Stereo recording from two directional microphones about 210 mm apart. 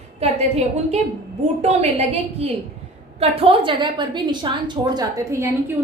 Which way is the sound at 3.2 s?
25° right (ahead or behind).